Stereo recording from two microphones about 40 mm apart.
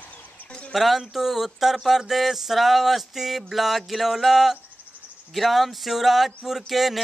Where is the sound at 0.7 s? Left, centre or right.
Centre.